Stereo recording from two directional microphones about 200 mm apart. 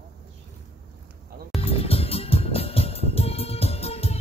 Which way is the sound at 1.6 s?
30° left (ahead or behind).